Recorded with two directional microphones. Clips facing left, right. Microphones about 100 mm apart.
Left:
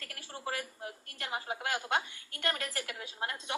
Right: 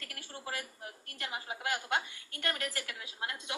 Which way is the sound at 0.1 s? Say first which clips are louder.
Left 3 dB; 30° left (ahead or behind).